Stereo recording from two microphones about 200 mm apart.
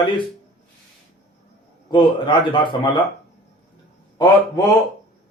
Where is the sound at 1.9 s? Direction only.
25° left (ahead or behind).